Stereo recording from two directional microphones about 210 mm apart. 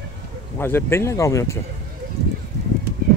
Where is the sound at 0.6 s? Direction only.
10° left (ahead or behind).